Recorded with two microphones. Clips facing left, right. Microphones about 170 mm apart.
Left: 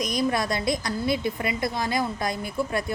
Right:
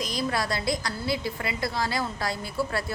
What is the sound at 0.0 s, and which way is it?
A woman's voice, 20° left (ahead or behind).